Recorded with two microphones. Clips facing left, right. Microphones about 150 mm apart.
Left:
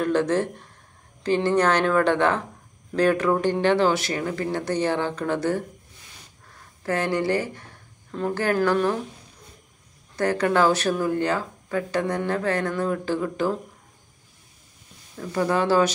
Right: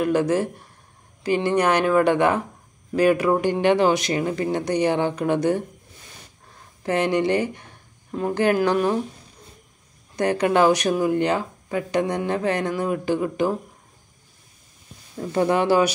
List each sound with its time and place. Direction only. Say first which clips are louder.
0.0 s speech: right 2 dB; 10° right (ahead or behind)
6.8 s speech: right 3 dB; 20° right (ahead or behind)
10.1 s speech: right 2 dB; 15° right (ahead or behind)
15.1 s speech: right 3 dB; 20° right (ahead or behind)